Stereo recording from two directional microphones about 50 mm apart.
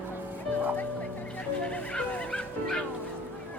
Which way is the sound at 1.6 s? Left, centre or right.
Left.